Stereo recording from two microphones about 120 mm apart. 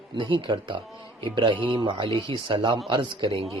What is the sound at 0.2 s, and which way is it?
Speech, 40° right (ahead or behind).